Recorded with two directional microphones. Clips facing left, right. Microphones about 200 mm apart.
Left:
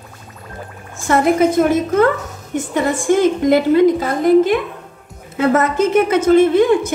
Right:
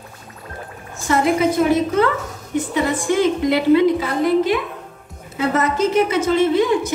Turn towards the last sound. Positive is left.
turn(degrees=50)  # may be behind; listen again after turning